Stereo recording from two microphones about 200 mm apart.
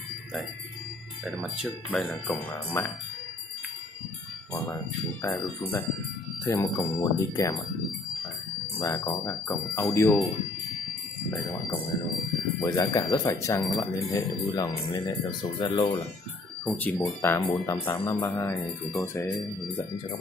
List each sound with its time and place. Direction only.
1.2 s speech: centre (ahead or behind)
6.4 s speech: 15° left (ahead or behind)
8.7 s speech: 20° left (ahead or behind)
12.6 s speech: 15° left (ahead or behind)
16.6 s speech: 10° left (ahead or behind)